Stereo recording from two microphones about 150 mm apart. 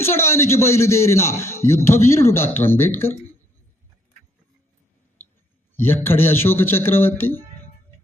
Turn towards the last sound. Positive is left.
turn(degrees=15)  # may be behind; listen again after turning